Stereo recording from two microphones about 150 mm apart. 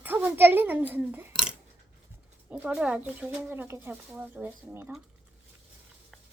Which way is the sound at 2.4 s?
10° right (ahead or behind).